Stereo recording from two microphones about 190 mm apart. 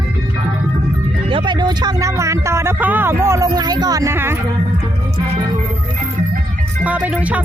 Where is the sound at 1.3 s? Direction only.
25° right (ahead or behind).